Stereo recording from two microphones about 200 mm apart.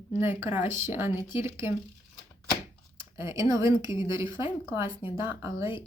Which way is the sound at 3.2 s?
15° right (ahead or behind).